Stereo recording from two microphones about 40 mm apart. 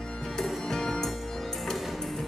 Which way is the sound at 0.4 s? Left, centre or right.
Centre.